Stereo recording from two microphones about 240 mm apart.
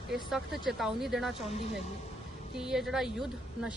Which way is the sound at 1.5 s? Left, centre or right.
Left.